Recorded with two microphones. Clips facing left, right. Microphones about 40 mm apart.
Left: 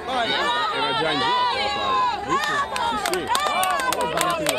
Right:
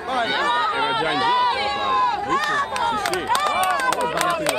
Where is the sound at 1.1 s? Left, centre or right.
Left.